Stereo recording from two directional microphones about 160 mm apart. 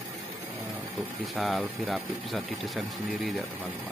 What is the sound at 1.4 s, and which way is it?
Speech, centre (ahead or behind).